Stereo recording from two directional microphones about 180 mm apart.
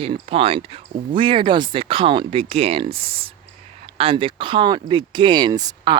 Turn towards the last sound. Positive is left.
turn(degrees=-20)  # may be behind; listen again after turning